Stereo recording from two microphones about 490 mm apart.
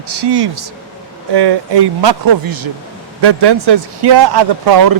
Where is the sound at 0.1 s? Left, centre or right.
Right.